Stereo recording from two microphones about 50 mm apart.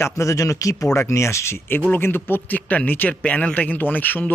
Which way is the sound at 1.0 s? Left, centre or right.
Left.